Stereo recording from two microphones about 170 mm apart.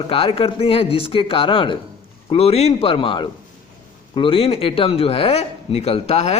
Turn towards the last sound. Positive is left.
turn(degrees=40)  # may be behind; listen again after turning